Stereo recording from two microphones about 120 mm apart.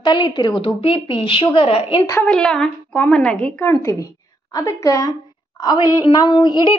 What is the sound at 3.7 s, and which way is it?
A woman's voice, 25° left (ahead or behind).